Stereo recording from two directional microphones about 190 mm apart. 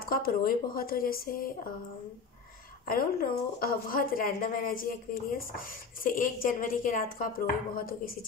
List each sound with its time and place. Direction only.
0.1 s a woman's voice: 50° left (ahead or behind)
2.9 s a woman's voice: 50° left (ahead or behind)